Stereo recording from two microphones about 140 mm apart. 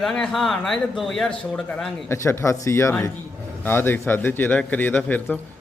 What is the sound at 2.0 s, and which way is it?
A man's voice, 20° left (ahead or behind).